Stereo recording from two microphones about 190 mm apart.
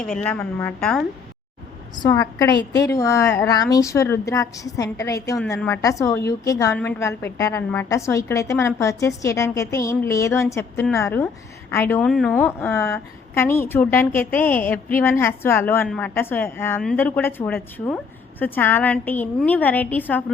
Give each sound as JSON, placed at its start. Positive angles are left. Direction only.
{"t": 0.2, "sound": "a woman's voice", "side_deg": 10}
{"t": 2.0, "sound": "a woman's voice", "side_deg": 20}